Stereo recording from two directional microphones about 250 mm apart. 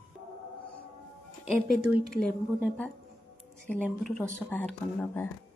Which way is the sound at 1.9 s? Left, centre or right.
Centre.